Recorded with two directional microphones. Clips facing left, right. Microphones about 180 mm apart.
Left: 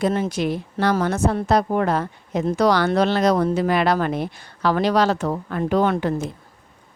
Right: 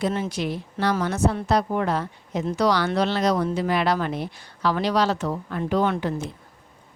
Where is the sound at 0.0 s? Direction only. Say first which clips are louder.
Left 4 dB; 45° left (ahead or behind).